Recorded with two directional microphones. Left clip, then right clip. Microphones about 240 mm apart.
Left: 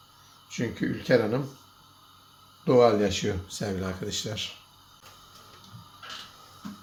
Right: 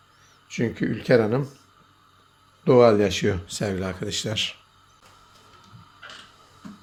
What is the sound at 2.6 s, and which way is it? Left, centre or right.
Speech, right.